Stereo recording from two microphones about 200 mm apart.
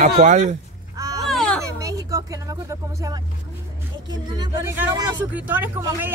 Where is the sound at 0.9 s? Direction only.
15° right (ahead or behind).